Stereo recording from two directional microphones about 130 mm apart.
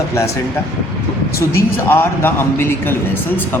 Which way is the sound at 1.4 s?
20° left (ahead or behind).